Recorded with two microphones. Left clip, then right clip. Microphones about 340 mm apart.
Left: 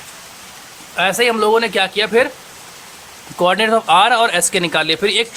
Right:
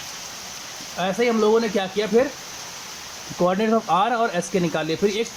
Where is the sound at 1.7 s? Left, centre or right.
Left.